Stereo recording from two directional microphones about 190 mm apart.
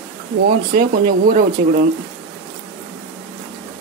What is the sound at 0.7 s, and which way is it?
Speech, 50° right (ahead or behind).